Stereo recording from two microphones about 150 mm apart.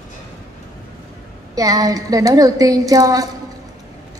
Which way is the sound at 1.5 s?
25° right (ahead or behind).